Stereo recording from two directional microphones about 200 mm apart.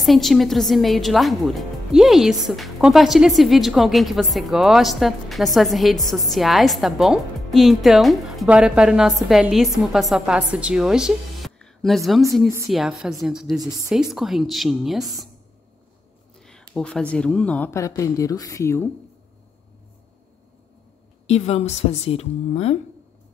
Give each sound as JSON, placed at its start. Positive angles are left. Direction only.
{"t": 0.0, "sound": "a woman's voice", "side_deg": 0}
{"t": 16.3, "sound": "speech", "side_deg": 5}
{"t": 21.3, "sound": "a woman's voice", "side_deg": 30}